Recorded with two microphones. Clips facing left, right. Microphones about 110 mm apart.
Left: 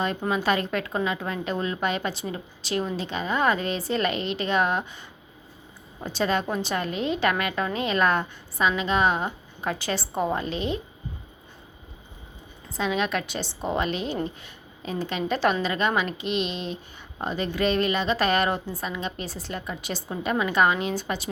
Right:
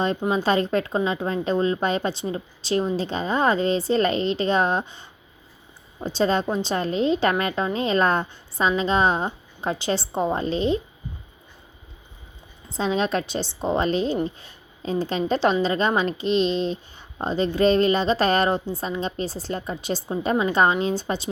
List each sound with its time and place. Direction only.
0.3 s a woman's voice: 30° right (ahead or behind)
12.7 s a woman's voice: 30° right (ahead or behind)